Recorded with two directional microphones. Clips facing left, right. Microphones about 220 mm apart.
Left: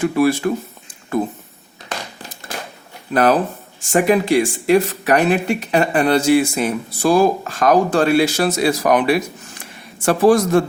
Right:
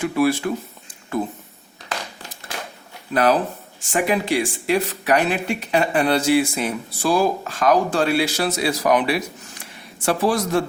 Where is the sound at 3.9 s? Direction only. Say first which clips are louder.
Left 6 dB; 45° left (ahead or behind).